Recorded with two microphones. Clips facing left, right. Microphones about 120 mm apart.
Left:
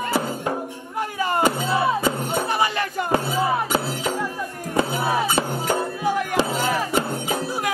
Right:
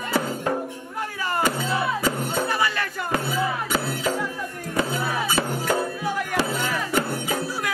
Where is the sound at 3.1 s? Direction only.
30° left (ahead or behind).